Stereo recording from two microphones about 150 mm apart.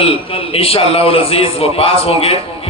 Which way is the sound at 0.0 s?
40° left (ahead or behind).